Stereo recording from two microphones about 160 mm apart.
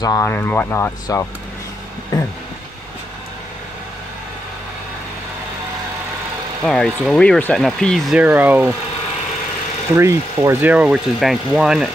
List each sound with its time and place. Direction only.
0.0 s speech: 20° left (ahead or behind)
6.6 s speech: 5° left (ahead or behind)
8.2 s speech: 10° right (ahead or behind)
9.9 s speech: 15° right (ahead or behind)